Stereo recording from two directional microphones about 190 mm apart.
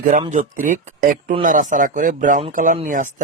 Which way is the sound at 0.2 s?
40° right (ahead or behind).